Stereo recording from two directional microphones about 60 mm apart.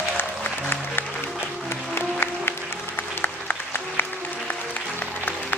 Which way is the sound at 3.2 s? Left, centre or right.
Left.